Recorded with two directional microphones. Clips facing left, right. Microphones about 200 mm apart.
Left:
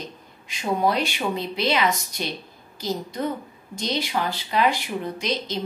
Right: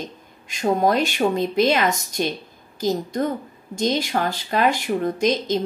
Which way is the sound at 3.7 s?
45° right (ahead or behind).